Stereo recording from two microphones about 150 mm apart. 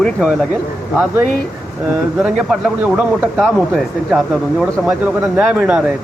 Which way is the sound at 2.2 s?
5° right (ahead or behind).